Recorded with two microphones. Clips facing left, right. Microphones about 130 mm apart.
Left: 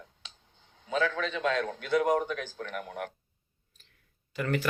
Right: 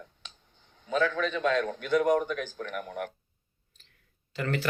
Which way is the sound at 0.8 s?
50° right (ahead or behind).